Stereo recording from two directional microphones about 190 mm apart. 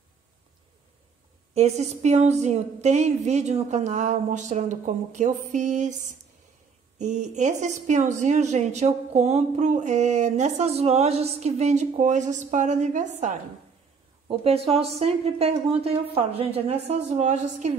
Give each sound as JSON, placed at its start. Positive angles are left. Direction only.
{"t": 1.5, "sound": "a woman's voice", "side_deg": -35}